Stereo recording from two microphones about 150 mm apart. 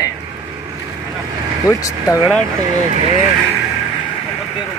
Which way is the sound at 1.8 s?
20° left (ahead or behind).